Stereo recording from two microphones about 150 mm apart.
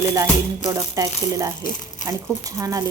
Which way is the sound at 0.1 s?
20° right (ahead or behind).